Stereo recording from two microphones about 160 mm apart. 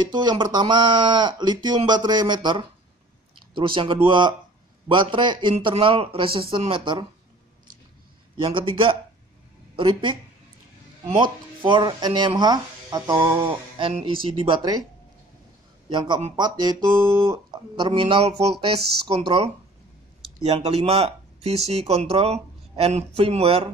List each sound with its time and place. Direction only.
0.0 s speech: 25° right (ahead or behind)
8.4 s speech: 30° right (ahead or behind)
11.6 s speech: 30° right (ahead or behind)
15.9 s speech: 30° right (ahead or behind)